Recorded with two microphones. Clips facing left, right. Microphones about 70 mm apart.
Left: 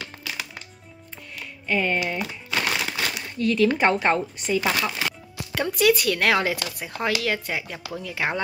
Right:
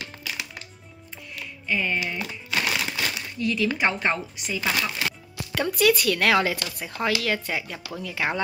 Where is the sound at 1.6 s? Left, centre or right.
Left.